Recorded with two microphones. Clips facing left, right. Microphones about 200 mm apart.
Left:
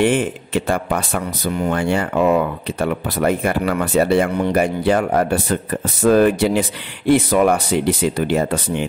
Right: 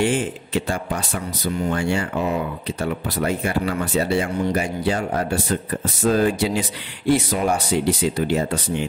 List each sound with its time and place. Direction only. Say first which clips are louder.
0.0 s speech: left 4 dB; 55° left (ahead or behind)